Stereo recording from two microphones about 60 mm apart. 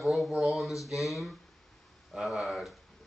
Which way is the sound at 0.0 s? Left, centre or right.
Centre.